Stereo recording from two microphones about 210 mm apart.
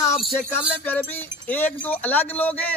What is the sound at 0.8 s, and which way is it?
Speech, 10° left (ahead or behind).